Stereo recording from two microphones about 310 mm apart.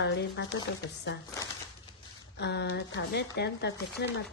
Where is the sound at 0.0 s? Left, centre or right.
Left.